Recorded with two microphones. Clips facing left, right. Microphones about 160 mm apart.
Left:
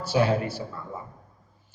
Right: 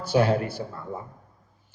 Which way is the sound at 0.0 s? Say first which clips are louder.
Right 1 dB; 55° right (ahead or behind).